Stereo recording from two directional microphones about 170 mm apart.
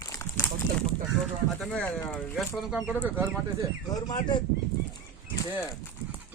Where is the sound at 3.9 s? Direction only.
25° left (ahead or behind).